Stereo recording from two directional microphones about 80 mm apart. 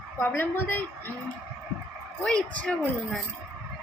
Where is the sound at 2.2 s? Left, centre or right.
Centre.